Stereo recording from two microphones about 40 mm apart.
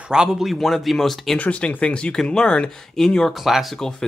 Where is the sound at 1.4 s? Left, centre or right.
Left.